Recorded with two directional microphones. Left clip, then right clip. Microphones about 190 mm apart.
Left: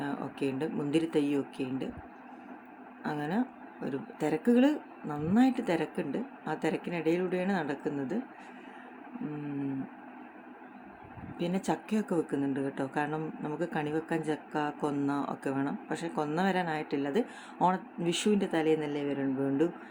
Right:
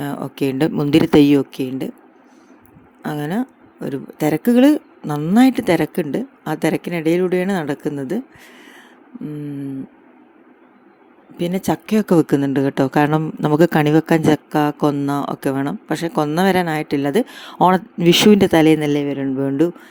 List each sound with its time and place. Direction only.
0.0 s speech: 45° right (ahead or behind)
3.0 s speech: 45° right (ahead or behind)
11.3 s speech: 40° right (ahead or behind)